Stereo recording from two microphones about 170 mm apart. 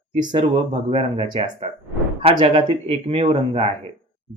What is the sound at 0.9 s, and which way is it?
Speech, 35° right (ahead or behind).